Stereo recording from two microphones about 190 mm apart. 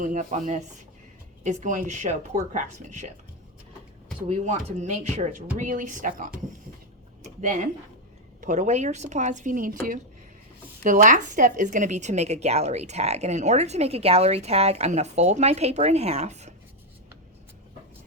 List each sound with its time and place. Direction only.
0.0 s speech: 40° right (ahead or behind)
4.3 s speech: 35° right (ahead or behind)
8.4 s speech: 40° right (ahead or behind)
10.8 s speech: 45° right (ahead or behind)